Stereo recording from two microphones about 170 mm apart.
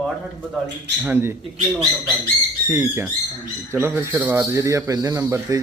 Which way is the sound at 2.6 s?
15° right (ahead or behind).